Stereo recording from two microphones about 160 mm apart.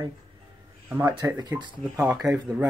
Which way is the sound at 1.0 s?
25° right (ahead or behind).